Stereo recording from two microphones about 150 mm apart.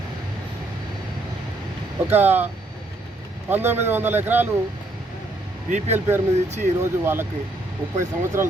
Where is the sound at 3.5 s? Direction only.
15° right (ahead or behind).